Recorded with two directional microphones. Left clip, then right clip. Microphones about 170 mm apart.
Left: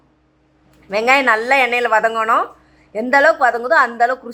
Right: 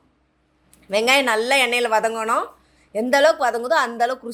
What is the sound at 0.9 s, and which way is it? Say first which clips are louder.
Speech: left 4 dB; 40° right (ahead or behind).